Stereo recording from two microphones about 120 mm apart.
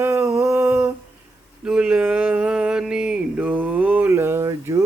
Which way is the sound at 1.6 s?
5° right (ahead or behind).